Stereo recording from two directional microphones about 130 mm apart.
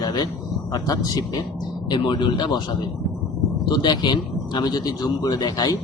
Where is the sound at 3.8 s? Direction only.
35° left (ahead or behind).